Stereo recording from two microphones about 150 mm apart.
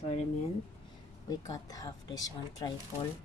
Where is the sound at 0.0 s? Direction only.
45° left (ahead or behind).